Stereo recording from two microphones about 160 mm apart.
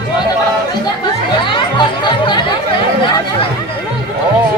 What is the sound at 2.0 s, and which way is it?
Speech, 30° left (ahead or behind).